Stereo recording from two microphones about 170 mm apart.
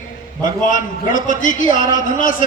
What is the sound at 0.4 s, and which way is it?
A man's voice, 50° left (ahead or behind).